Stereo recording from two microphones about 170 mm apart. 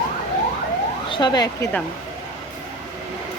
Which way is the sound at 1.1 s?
25° left (ahead or behind).